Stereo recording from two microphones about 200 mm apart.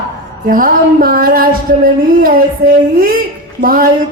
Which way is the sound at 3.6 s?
45° right (ahead or behind).